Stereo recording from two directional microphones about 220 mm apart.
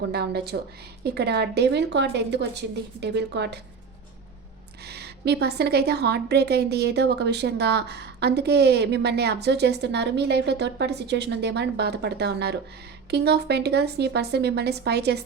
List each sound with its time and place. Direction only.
0.1 s a woman's voice: 45° right (ahead or behind)
4.8 s a woman's voice: 45° right (ahead or behind)